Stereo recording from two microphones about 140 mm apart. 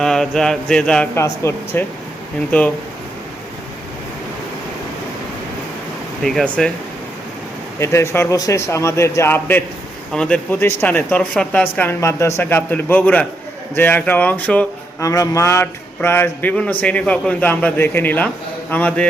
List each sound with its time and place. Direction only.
0.0 s mantra: 5° left (ahead or behind)
1.1 s a man's voice: 20° left (ahead or behind)
6.2 s mantra: 5° left (ahead or behind)
7.8 s a man's voice: 20° left (ahead or behind)
15.0 s speech: 25° left (ahead or behind)